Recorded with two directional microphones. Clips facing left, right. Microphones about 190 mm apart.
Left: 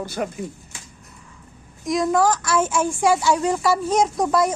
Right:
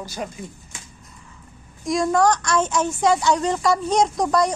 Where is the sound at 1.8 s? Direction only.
Centre (ahead or behind).